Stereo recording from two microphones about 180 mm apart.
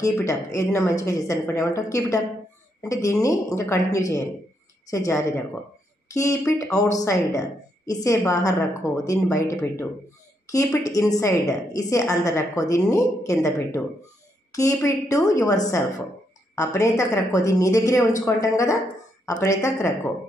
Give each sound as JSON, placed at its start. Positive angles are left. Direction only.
{"t": 0.0, "sound": "a woman's voice", "side_deg": 15}